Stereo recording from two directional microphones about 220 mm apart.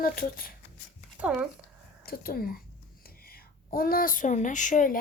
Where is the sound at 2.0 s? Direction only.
45° left (ahead or behind).